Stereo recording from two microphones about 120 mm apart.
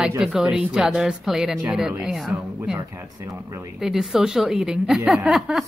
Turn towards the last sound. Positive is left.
turn(degrees=-5)  # may be behind; listen again after turning